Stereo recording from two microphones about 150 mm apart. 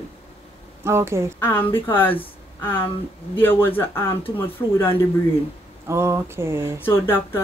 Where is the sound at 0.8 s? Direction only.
15° right (ahead or behind).